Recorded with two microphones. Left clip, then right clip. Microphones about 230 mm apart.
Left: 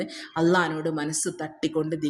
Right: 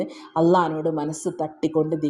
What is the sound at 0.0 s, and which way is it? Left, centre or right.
Speech, centre.